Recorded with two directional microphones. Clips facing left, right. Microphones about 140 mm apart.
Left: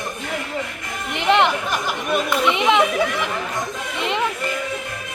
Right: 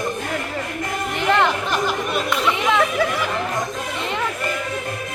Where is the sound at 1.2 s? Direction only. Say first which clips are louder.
Left 2 dB; 20° left (ahead or behind).